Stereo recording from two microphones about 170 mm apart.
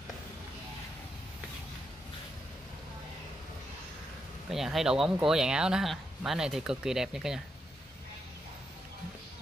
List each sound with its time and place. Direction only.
4.5 s speech: centre (ahead or behind)